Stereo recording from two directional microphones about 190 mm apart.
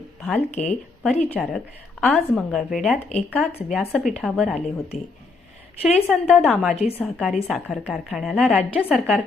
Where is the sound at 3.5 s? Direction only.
30° left (ahead or behind).